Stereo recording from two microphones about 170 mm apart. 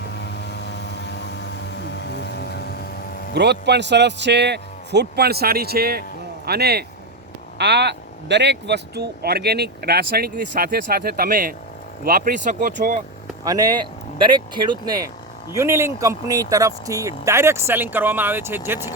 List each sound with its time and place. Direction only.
0.3 s vehicle: 85° left; by 3.3 s 65° left (ahead or behind)
3.3 s speech: 80° right
7.6 s speech: 90° right; by 13.0 s 55° right (ahead or behind)
13.4 s speech: 20° right (ahead or behind)